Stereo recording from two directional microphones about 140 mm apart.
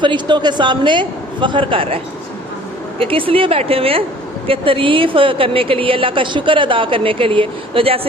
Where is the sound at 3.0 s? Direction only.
40° right (ahead or behind).